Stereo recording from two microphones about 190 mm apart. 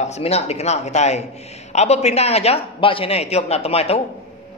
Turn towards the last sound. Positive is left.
turn(degrees=30)  # may be behind; listen again after turning